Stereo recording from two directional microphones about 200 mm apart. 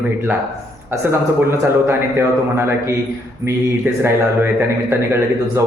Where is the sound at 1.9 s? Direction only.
10° right (ahead or behind).